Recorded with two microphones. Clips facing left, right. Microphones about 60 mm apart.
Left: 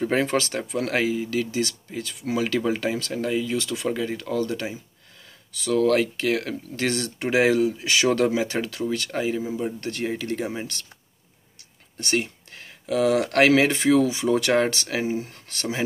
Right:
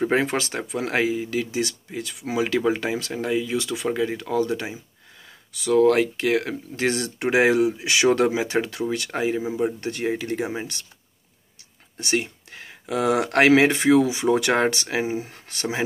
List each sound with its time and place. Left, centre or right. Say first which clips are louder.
0.0 s speech: right 1 dB; centre
1.4 s speech: even; centre
12.0 s speech: even; centre
12.5 s speech: left 2 dB; right